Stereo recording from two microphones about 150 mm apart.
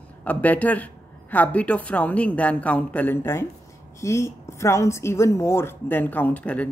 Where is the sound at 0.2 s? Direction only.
10° left (ahead or behind).